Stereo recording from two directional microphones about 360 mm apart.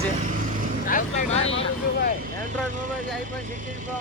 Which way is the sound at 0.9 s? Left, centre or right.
Centre.